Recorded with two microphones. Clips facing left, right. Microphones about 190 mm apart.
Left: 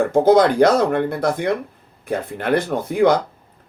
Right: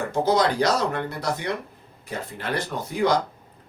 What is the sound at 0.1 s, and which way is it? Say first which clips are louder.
Speech: left 6 dB; 55° left (ahead or behind).